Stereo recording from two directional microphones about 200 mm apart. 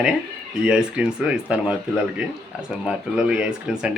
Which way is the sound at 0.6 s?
5° right (ahead or behind).